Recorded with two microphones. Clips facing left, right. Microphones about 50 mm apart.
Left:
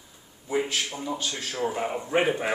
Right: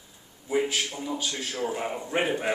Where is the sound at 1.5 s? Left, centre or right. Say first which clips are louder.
Left 3 dB; centre.